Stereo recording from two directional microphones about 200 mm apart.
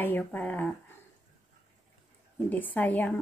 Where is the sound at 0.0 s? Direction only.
10° left (ahead or behind).